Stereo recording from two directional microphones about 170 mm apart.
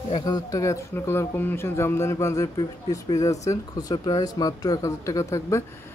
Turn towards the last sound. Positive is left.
turn(degrees=20)  # may be behind; listen again after turning